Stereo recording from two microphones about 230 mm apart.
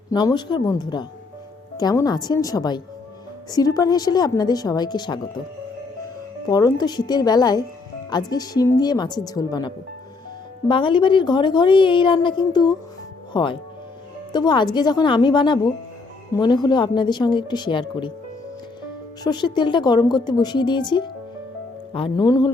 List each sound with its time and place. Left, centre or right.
0.1 s a woman's voice: centre
6.5 s a woman's voice: centre
19.2 s a woman's voice: centre